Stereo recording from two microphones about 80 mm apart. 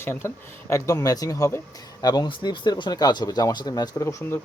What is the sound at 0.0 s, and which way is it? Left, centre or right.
Speech, left.